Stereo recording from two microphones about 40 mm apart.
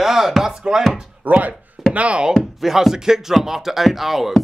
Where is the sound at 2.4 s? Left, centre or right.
Centre.